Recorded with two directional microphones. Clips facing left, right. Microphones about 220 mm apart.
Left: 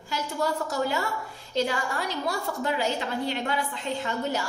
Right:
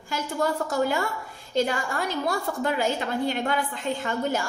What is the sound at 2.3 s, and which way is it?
A woman's voice, 50° right (ahead or behind).